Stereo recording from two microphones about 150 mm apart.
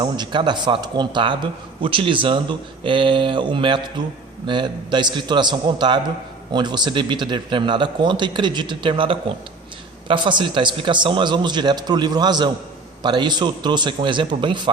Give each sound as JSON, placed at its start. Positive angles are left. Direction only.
{"t": 0.0, "sound": "a man's voice", "side_deg": -30}